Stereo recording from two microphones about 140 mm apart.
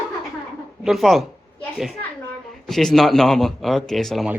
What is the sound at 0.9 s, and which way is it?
Speech, centre (ahead or behind).